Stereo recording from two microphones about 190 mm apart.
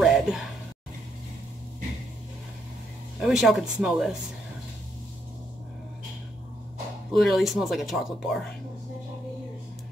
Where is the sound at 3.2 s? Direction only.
Centre (ahead or behind).